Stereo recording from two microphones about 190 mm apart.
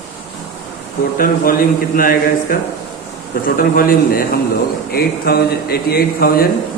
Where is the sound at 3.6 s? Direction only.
50° left (ahead or behind).